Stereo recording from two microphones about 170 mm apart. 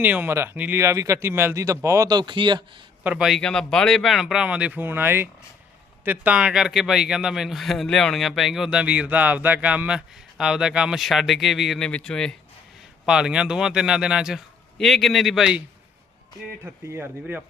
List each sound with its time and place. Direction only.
0.0 s a man's voice: 10° right (ahead or behind); by 2.6 s 30° right (ahead or behind)
3.0 s speech: 5° right (ahead or behind)
16.9 s a man's voice: 10° right (ahead or behind)